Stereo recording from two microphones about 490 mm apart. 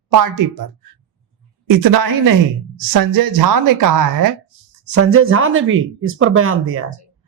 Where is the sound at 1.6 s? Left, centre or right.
Right.